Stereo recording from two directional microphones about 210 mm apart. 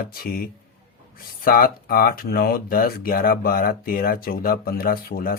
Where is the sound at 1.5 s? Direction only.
45° left (ahead or behind).